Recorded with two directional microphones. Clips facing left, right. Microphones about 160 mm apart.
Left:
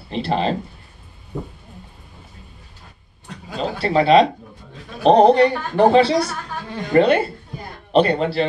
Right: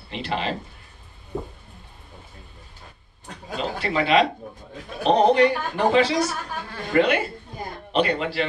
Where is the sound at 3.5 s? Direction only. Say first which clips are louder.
Left 6 dB; 40° left (ahead or behind).